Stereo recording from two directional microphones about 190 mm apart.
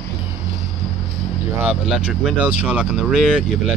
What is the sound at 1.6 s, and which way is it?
Speech, 5° right (ahead or behind).